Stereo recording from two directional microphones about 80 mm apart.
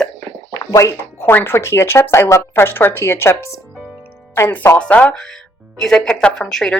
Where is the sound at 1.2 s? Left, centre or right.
Left.